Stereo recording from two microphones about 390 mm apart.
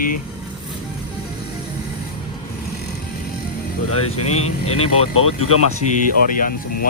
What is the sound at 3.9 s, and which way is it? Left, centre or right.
Speech, left.